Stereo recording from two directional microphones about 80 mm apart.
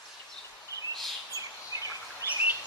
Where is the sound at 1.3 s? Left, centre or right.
Right.